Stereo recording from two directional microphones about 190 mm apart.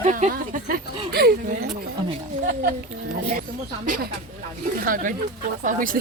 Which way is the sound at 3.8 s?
45° right (ahead or behind).